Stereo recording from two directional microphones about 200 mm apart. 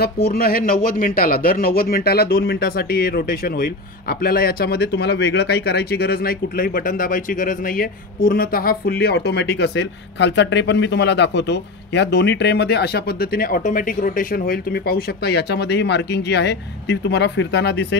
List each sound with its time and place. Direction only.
0.0 s speech: 50° left (ahead or behind)